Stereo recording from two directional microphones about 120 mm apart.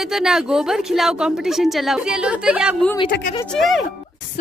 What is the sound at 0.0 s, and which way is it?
A woman's voice, 5° right (ahead or behind).